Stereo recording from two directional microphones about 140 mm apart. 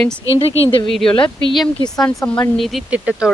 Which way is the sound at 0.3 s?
45° left (ahead or behind).